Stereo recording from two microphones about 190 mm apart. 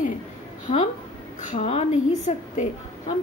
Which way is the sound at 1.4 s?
35° left (ahead or behind).